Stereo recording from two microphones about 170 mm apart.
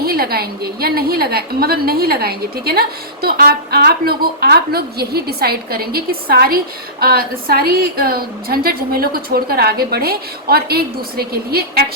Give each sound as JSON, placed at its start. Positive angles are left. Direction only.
{"t": 0.0, "sound": "a woman's voice", "side_deg": -65}